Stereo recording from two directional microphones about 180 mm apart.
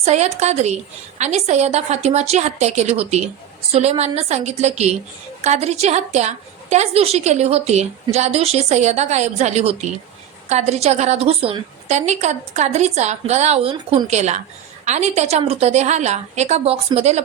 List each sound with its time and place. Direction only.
0.0 s a woman's voice: 40° right (ahead or behind)